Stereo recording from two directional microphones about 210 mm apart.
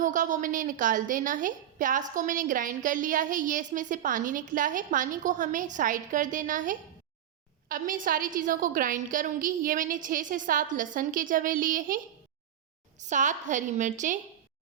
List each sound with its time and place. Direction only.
0.0 s a woman's voice: 40° right (ahead or behind)
13.0 s a woman's voice: 35° right (ahead or behind)